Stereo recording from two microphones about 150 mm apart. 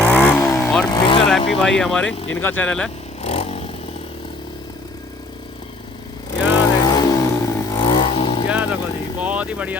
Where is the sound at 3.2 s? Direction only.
40° left (ahead or behind).